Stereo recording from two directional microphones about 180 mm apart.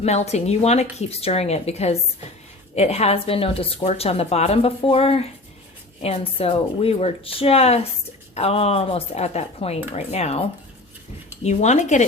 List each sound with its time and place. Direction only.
0.0 s speech: 35° left (ahead or behind)
11.4 s speech: 40° left (ahead or behind)